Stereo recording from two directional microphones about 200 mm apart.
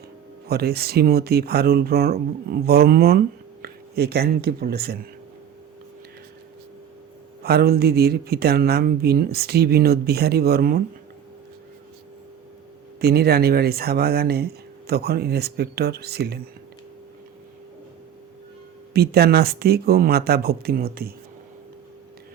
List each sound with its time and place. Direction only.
0.4 s speech: 50° right (ahead or behind)
7.4 s speech: 50° right (ahead or behind)
13.0 s speech: 50° right (ahead or behind)
18.9 s speech: 50° right (ahead or behind)